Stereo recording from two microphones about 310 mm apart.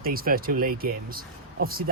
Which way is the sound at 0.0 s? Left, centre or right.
Right.